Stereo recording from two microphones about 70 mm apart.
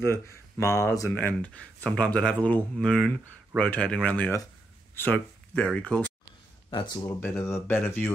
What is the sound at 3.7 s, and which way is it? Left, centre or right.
Speech, centre.